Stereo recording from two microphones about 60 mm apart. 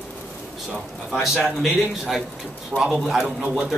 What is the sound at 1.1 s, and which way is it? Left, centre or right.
A man's voice, centre.